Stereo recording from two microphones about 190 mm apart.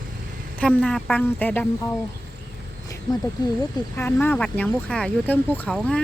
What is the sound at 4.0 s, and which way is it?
Speech, 10° left (ahead or behind).